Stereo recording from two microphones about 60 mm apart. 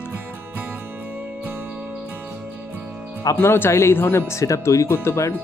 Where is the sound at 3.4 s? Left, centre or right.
Left.